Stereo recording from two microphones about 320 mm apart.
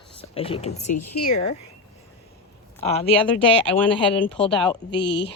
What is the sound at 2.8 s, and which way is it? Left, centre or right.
Speech, centre.